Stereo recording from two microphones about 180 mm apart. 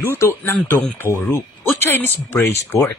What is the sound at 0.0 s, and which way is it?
Speech, 15° left (ahead or behind).